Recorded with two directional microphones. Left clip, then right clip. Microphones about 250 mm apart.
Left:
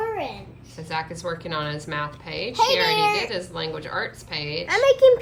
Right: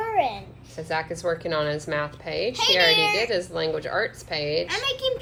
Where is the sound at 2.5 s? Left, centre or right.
Centre.